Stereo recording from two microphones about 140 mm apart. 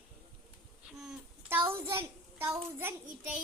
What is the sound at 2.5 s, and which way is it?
Speech, 15° right (ahead or behind).